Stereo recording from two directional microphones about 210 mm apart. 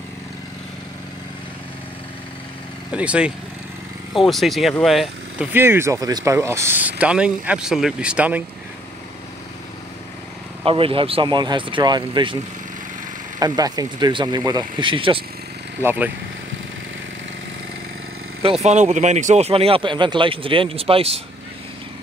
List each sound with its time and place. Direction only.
2.9 s speech: 5° right (ahead or behind)
10.6 s speech: 25° right (ahead or behind)
13.4 s speech: 20° right (ahead or behind)
15.8 s speech: 10° right (ahead or behind)
18.4 s speech: 30° right (ahead or behind)